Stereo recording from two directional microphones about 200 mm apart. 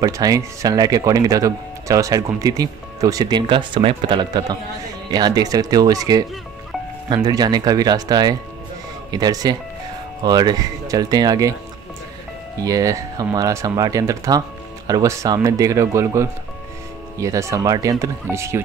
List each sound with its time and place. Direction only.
0.0 s speech: 15° right (ahead or behind)
7.2 s speech: 20° right (ahead or behind)
12.6 s speech: 15° right (ahead or behind)